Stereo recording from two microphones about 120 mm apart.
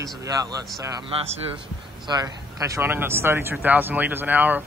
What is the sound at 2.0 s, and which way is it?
Speech, 35° right (ahead or behind).